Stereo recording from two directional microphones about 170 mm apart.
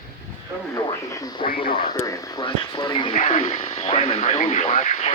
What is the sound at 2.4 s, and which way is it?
Speech, 30° left (ahead or behind).